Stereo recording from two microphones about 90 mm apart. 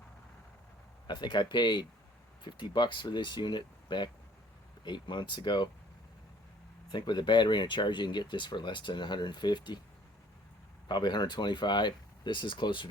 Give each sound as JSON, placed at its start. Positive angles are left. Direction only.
{"t": 1.0, "sound": "speech", "side_deg": 55}
{"t": 6.9, "sound": "speech", "side_deg": 55}
{"t": 10.8, "sound": "speech", "side_deg": 55}